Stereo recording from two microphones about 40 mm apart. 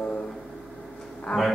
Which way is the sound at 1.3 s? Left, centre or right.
Left.